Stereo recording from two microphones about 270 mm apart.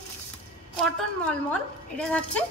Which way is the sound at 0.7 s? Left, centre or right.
Centre.